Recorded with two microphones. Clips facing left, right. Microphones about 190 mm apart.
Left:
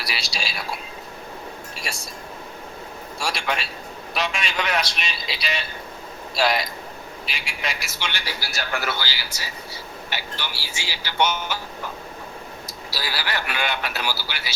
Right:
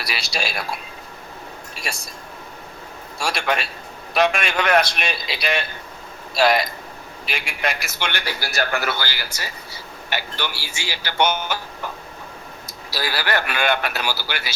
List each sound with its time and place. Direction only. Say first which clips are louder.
0.0 s a man's voice: right 4 dB; 55° right (ahead or behind)
3.2 s a man's voice: right 4 dB; 60° right (ahead or behind)
12.9 s speech: right 6 dB; 55° right (ahead or behind)